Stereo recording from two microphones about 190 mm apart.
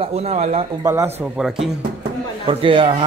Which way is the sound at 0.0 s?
35° right (ahead or behind).